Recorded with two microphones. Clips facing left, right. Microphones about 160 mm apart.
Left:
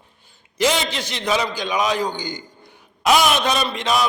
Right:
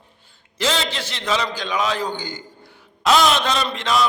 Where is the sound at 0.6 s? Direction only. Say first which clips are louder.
Left 3 dB; 15° left (ahead or behind).